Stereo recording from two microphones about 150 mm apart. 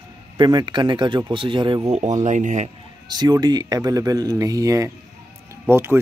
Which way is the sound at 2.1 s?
55° right (ahead or behind).